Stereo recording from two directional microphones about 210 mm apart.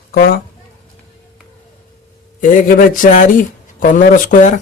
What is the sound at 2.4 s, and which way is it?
Speech, 40° left (ahead or behind).